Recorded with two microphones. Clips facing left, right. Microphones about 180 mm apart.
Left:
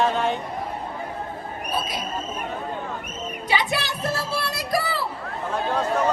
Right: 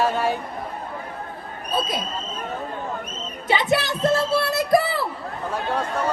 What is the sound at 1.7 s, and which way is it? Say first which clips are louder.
Speech: right 4 dB; 25° right (ahead or behind).